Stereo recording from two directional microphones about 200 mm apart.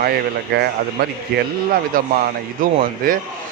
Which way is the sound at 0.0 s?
50° right (ahead or behind).